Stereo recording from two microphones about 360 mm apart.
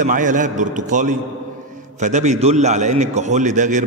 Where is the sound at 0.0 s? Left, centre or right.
Right.